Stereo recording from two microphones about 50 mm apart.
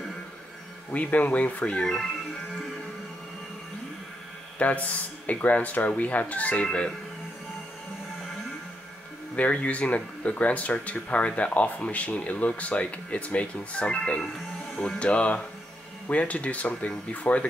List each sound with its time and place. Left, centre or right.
0.9 s speech: left
4.6 s speech: left
9.3 s speech: left